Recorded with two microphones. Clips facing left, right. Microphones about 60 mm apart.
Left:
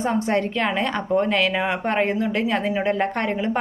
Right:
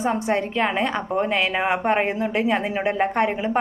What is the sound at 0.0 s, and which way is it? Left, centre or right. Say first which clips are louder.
Speech: left 1 dB; centre.